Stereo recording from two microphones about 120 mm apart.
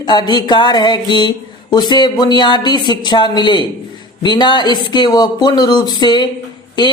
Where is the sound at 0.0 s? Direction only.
35° left (ahead or behind).